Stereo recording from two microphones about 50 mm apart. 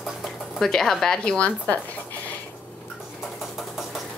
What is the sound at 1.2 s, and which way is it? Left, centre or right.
Speech, left.